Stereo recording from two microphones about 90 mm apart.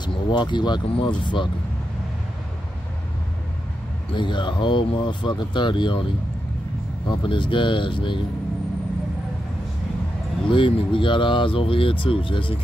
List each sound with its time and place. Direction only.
0.0 s speech: 60° left (ahead or behind)
4.1 s speech: 60° left (ahead or behind)
7.1 s speech: 65° left (ahead or behind)
10.5 s speech: 70° left (ahead or behind)